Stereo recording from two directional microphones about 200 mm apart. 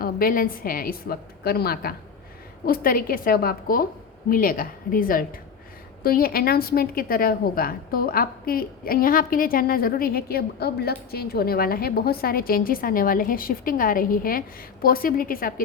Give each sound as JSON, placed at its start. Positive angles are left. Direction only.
{"t": 0.0, "sound": "a woman's voice", "side_deg": 45}